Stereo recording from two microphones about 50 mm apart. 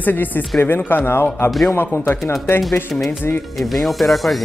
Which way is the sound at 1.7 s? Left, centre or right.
Left.